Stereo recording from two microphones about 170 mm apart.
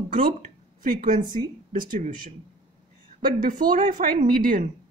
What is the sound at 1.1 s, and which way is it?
Speech, 25° right (ahead or behind).